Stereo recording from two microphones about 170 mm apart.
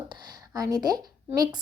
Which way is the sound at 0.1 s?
25° right (ahead or behind).